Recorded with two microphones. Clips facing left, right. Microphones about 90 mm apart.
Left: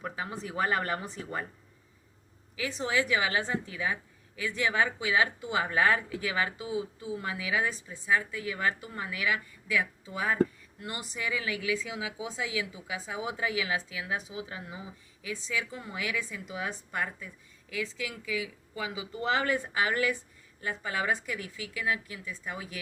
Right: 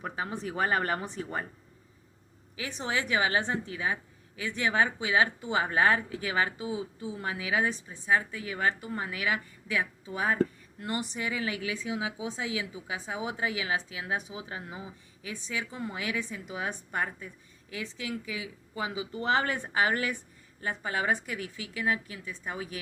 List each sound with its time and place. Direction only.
0.0 s speech: 35° right (ahead or behind)
2.6 s speech: 35° right (ahead or behind)